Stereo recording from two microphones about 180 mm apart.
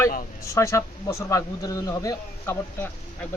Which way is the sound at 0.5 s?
15° left (ahead or behind).